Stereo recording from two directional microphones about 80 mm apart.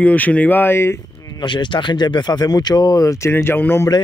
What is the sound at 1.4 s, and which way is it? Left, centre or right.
Speech, left.